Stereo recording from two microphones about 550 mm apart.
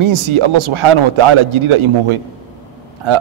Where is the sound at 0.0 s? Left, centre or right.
Right.